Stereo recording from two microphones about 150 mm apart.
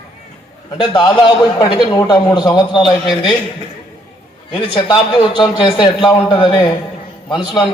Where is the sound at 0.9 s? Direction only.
30° left (ahead or behind).